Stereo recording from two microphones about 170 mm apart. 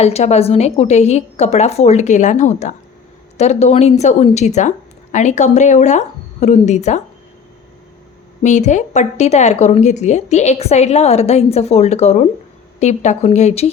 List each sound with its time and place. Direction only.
0.0 s speech: 40° left (ahead or behind)
8.4 s speech: 45° left (ahead or behind)